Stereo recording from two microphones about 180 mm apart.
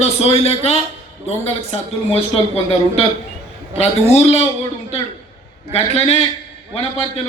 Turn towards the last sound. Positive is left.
turn(degrees=35)  # may be behind; listen again after turning